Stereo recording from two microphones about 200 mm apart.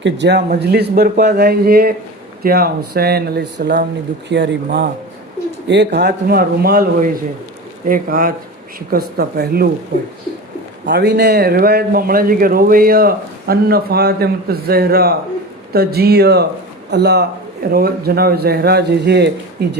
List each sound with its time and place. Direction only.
0.0 s a man's voice: 60° right (ahead or behind)
10.8 s a man's voice: 60° right (ahead or behind)